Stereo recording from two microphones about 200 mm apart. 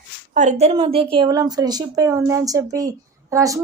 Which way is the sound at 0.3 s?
35° right (ahead or behind).